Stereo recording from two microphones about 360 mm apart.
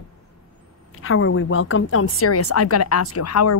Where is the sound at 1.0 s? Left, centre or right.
Left.